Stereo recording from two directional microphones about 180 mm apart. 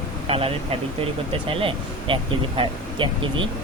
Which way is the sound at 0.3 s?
30° right (ahead or behind).